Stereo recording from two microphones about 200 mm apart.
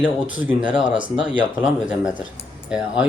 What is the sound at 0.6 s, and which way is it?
Speech, 25° right (ahead or behind).